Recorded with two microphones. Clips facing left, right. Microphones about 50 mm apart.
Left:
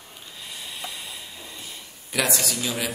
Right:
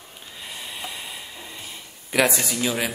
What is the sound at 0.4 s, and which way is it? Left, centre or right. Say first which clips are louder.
Snort: right 2 dB; centre.